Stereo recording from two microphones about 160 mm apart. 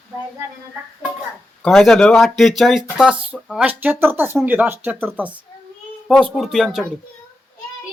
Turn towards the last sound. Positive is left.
turn(degrees=0)  # may be behind; listen again after turning